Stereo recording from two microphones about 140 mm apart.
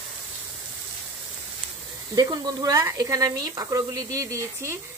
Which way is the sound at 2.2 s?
30° right (ahead or behind).